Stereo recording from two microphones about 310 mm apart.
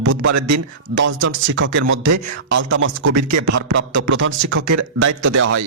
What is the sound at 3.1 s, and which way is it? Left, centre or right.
Speech, right.